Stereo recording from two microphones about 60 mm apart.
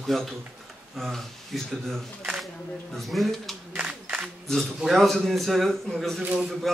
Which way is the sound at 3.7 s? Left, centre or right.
Right.